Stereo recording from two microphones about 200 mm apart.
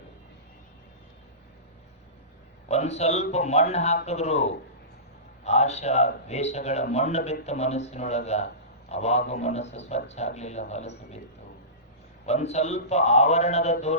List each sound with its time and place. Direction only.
2.6 s a man's voice: 35° left (ahead or behind)
12.2 s a man's voice: 35° left (ahead or behind)